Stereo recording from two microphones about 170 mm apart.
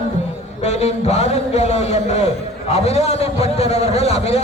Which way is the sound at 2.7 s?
40° left (ahead or behind).